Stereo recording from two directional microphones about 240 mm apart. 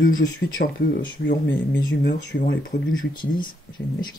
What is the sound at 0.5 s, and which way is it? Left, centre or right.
Speech, left.